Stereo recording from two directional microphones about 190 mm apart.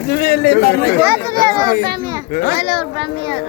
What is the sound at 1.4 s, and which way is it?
Speech, 20° right (ahead or behind).